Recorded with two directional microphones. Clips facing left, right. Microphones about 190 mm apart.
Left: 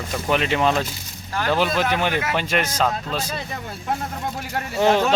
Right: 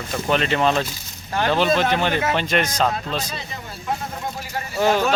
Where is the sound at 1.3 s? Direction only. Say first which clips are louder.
Right 2 dB; 25° right (ahead or behind).